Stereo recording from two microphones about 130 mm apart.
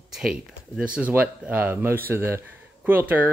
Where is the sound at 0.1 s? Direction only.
5° right (ahead or behind).